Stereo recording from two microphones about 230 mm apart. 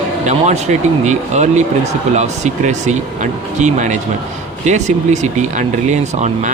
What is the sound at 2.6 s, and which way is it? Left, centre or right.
Speech, right.